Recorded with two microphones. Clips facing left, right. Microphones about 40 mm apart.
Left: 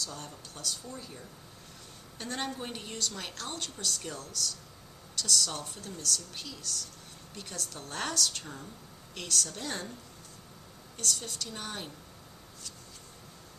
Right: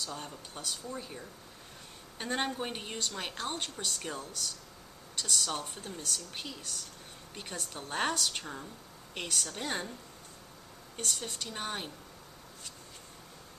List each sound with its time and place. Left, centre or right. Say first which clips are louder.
0.0 s a woman's voice: right 1 dB; right
10.9 s a woman's voice: left 1 dB; right